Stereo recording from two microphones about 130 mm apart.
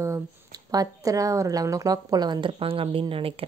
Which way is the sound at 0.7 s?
25° right (ahead or behind).